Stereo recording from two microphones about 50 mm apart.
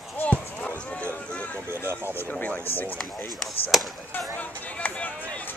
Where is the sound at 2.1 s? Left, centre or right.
Left.